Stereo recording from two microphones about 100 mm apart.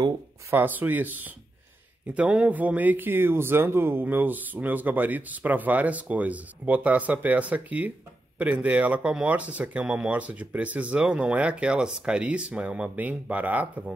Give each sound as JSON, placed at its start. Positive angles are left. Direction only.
{"t": 0.5, "sound": "speech", "side_deg": -20}